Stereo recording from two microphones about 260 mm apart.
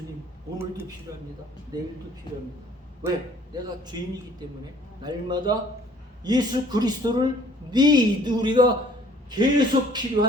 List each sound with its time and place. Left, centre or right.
0.6 s speech: centre
3.0 s a man's voice: centre
5.0 s speech: centre